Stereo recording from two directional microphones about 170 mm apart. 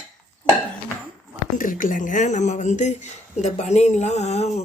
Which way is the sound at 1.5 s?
55° left (ahead or behind).